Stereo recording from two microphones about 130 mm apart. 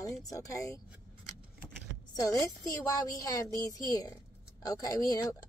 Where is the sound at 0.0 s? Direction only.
25° left (ahead or behind).